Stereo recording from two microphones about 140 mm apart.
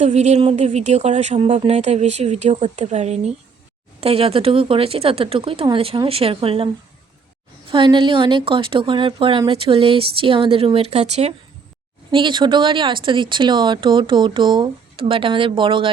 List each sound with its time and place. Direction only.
0.0 s speech: 55° right (ahead or behind)
1.4 s speech: 45° right (ahead or behind)
7.7 s speech: 35° right (ahead or behind)
12.1 s speech: 35° right (ahead or behind)